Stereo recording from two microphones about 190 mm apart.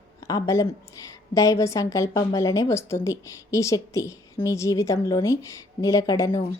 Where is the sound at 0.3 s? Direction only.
20° left (ahead or behind).